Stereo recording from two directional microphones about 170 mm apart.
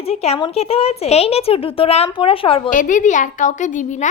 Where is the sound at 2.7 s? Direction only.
50° left (ahead or behind).